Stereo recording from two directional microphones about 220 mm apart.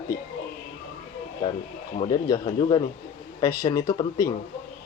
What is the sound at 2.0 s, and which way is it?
A man's voice, 15° left (ahead or behind).